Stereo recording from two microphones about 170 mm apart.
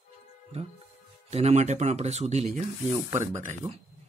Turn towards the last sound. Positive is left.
turn(degrees=-45)  # may be behind; listen again after turning